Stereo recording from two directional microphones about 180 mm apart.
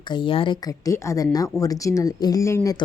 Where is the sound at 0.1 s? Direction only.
30° left (ahead or behind).